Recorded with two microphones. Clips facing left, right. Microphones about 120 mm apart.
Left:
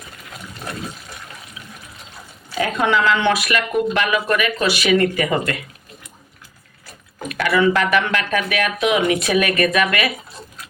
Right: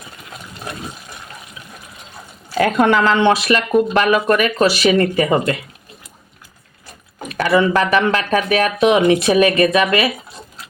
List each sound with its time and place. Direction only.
2.6 s speech: 50° right (ahead or behind); by 5.5 s 30° right (ahead or behind)
7.3 s speech: 35° right (ahead or behind)